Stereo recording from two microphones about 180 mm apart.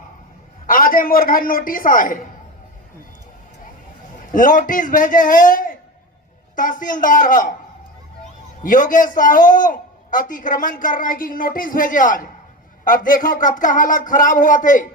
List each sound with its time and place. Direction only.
0.7 s a man's voice: 50° left (ahead or behind)
4.3 s a man's voice: 50° left (ahead or behind)
8.6 s a man's voice: 50° left (ahead or behind)